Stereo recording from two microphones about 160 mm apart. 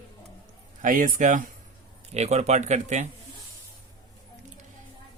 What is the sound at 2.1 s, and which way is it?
Speech, 45° right (ahead or behind).